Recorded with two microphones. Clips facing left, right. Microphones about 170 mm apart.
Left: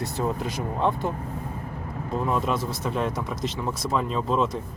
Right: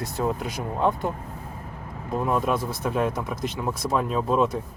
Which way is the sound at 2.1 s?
10° right (ahead or behind).